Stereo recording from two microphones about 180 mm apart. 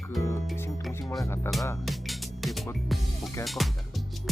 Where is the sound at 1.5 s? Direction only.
15° left (ahead or behind).